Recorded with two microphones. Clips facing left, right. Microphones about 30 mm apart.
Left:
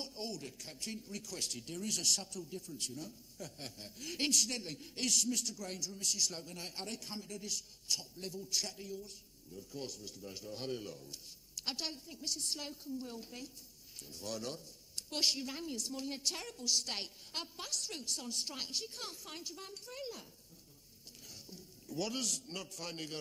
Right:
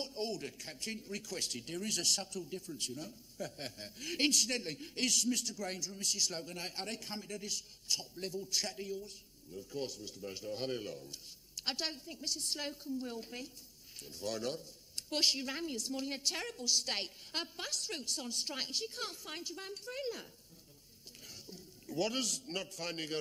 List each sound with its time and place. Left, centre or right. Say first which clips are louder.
0.0 s speech: right 4 dB; right
21.5 s a man's voice: right 2 dB; right